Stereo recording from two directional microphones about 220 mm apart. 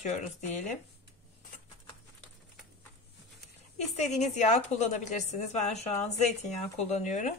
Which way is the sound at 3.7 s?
30° left (ahead or behind).